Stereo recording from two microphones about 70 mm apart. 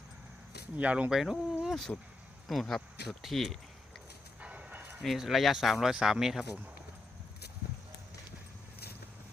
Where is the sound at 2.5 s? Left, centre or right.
Centre.